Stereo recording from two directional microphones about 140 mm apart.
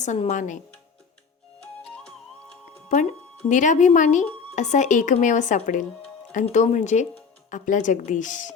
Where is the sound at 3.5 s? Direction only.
65° left (ahead or behind).